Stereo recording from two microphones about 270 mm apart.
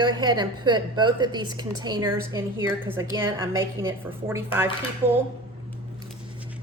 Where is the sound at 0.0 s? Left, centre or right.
Centre.